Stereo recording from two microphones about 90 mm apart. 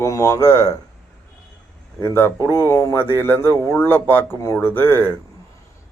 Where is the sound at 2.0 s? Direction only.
25° left (ahead or behind).